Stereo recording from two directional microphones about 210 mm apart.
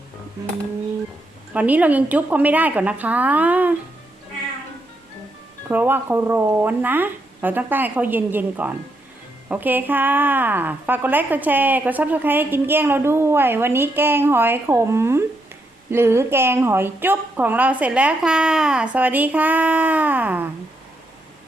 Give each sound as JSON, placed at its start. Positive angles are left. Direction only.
{"t": 1.5, "sound": "a woman's voice", "side_deg": -5}
{"t": 5.6, "sound": "a woman's voice", "side_deg": -10}